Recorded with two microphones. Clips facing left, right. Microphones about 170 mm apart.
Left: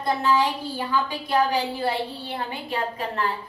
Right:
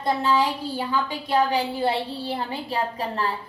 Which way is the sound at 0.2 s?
30° right (ahead or behind).